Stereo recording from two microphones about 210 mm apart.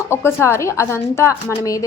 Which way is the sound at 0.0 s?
10° left (ahead or behind).